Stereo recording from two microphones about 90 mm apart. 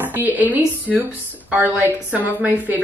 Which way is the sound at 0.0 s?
20° right (ahead or behind).